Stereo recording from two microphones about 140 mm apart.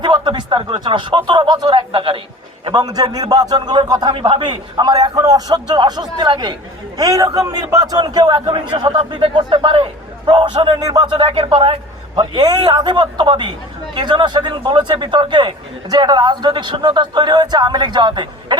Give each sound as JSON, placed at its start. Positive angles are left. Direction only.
{"t": 0.0, "sound": "a man's voice", "side_deg": -35}
{"t": 12.1, "sound": "a man's voice", "side_deg": -30}